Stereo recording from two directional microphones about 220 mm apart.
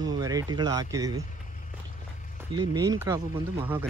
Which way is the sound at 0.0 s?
15° right (ahead or behind).